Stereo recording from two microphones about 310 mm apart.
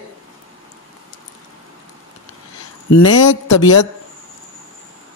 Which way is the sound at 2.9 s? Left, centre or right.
Left.